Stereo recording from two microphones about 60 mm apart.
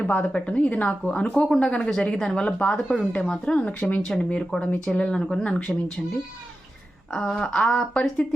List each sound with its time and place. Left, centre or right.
0.2 s a woman's voice: centre
3.8 s a woman's voice: left
4.1 s speech: centre
7.1 s speech: centre